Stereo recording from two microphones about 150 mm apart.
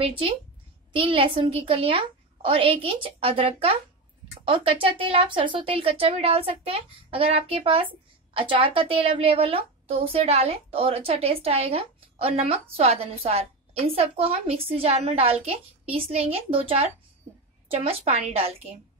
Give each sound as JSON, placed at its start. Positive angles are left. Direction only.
{"t": 0.0, "sound": "a woman's voice", "side_deg": -35}